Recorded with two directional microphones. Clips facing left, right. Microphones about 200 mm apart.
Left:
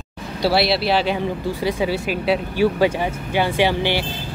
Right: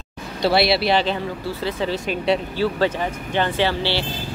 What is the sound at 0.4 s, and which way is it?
Speech, 5° left (ahead or behind).